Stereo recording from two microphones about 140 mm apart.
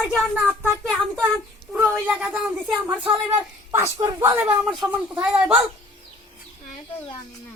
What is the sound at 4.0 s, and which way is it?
Speech, 25° right (ahead or behind).